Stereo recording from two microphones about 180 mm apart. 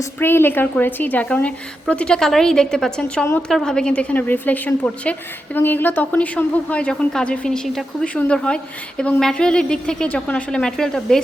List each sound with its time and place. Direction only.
0.0 s a woman's voice: 15° left (ahead or behind)